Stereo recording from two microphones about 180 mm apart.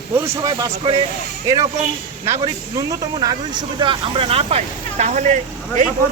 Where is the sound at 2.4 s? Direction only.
20° right (ahead or behind); by 5.8 s 45° right (ahead or behind).